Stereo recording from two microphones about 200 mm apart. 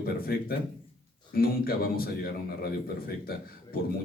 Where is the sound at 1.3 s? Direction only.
50° left (ahead or behind).